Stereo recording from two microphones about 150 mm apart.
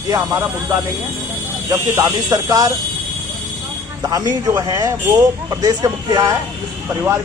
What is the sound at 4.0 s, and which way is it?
A man's voice, 25° right (ahead or behind).